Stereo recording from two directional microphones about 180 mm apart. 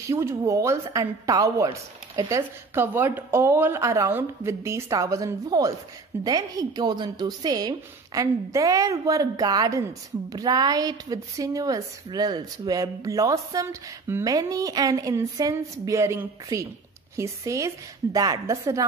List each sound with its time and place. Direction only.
0.1 s a woman's voice: 15° right (ahead or behind)